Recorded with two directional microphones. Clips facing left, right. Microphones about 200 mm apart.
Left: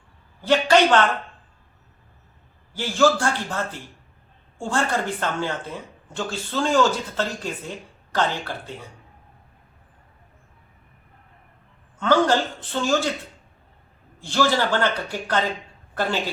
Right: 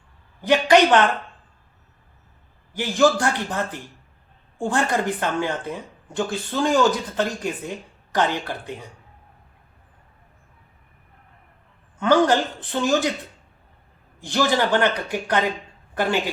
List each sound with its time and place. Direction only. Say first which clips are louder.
0.4 s speech: right 1 dB; 15° right (ahead or behind)
2.7 s a woman's voice: right 1 dB; 15° right (ahead or behind)
11.9 s speech: right 2 dB; 15° right (ahead or behind)
14.2 s speech: right 1 dB; 15° right (ahead or behind)